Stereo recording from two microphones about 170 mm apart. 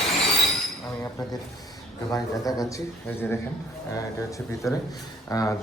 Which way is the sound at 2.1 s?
20° left (ahead or behind).